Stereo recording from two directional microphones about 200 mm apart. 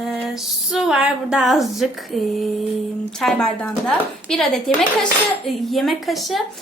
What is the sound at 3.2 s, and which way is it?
A woman's voice, 5° left (ahead or behind).